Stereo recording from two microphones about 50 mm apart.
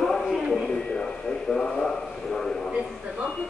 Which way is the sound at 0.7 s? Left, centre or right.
Centre.